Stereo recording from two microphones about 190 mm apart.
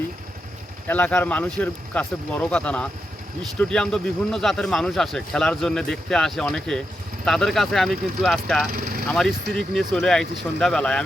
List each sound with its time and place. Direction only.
0.9 s a man's voice: 10° left (ahead or behind)
8.7 s speech: 55° right (ahead or behind)
9.0 s a man's voice: centre (ahead or behind)